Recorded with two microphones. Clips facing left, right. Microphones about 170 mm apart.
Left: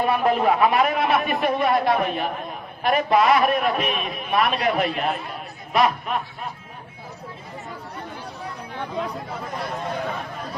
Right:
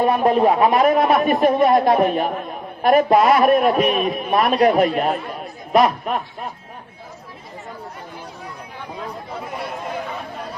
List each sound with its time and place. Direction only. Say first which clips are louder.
0.0 s a man's voice: right 4 dB; 40° right (ahead or behind)